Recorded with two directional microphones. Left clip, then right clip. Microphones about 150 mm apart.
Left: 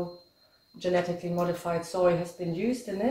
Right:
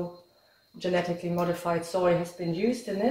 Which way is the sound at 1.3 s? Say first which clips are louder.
Right 1 dB; 15° right (ahead or behind).